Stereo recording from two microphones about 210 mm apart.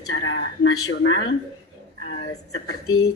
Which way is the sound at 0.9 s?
60° left (ahead or behind).